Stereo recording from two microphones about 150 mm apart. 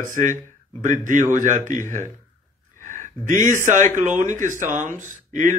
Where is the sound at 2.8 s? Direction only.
55° right (ahead or behind).